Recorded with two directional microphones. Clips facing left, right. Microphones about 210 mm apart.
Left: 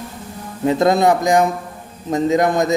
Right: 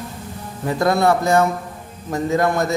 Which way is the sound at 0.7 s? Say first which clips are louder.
Left 3 dB; 20° left (ahead or behind).